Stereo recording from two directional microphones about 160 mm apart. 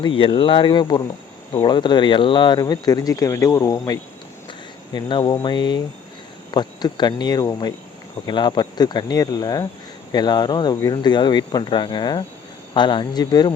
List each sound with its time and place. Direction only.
0.0 s speech: 30° left (ahead or behind)